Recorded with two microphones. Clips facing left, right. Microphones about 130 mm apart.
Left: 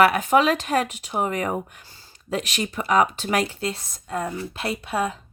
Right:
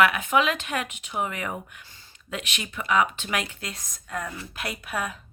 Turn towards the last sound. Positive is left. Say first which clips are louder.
# left 6 dB
turn(degrees=25)  # may be behind; listen again after turning